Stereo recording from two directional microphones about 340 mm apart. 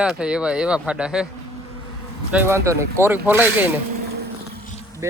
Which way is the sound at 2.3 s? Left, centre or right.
Centre.